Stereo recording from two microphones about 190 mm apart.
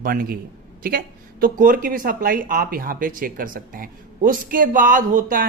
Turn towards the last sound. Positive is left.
turn(degrees=-45)  # may be behind; listen again after turning